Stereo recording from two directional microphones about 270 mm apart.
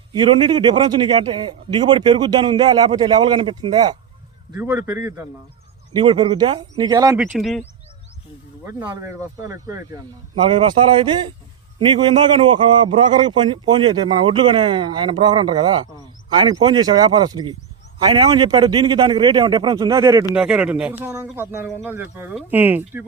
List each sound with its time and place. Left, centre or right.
0.1 s a man's voice: centre
7.3 s speech: centre
8.6 s a man's voice: centre